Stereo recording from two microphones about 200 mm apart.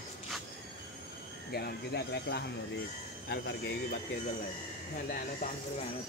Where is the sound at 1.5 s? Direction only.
55° left (ahead or behind).